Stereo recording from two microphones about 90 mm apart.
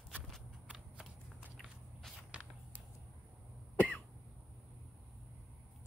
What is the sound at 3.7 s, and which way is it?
Cough, 15° left (ahead or behind).